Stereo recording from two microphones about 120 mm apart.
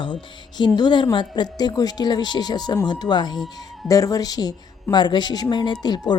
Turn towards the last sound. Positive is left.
turn(degrees=35)  # may be behind; listen again after turning